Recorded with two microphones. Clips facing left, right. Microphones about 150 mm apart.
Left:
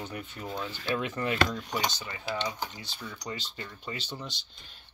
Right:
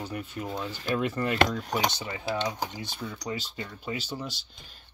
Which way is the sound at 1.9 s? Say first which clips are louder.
Right 5 dB; 25° right (ahead or behind).